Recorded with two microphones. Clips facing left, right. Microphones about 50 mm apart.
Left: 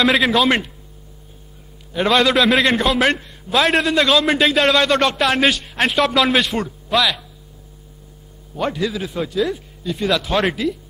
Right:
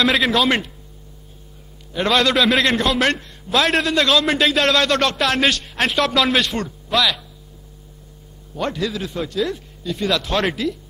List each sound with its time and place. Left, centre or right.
0.0 s a man's voice: centre
2.0 s a man's voice: centre
8.5 s a man's voice: centre